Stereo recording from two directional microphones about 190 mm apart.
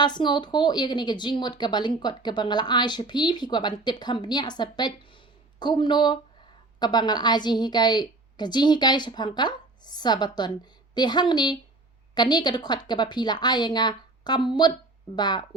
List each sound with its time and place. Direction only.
0.0 s speech: 25° left (ahead or behind)